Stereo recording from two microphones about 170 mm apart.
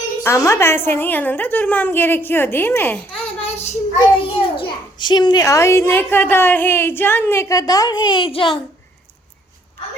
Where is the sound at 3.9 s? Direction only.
30° left (ahead or behind).